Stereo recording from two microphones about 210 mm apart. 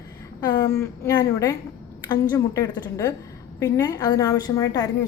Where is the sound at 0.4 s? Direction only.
15° left (ahead or behind).